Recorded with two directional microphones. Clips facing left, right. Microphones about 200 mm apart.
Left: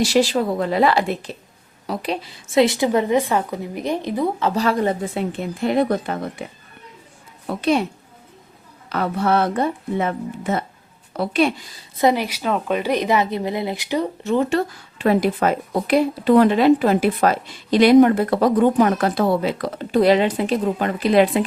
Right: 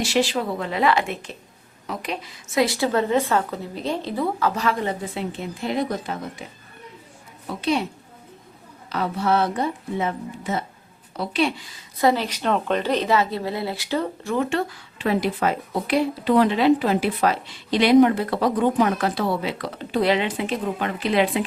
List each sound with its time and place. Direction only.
0.0 s a woman's voice: 40° left (ahead or behind)
5.6 s a woman's voice: 60° left (ahead or behind)
8.9 s a woman's voice: 55° left (ahead or behind)
11.9 s a woman's voice: 15° left (ahead or behind)
14.9 s a woman's voice: 45° left (ahead or behind)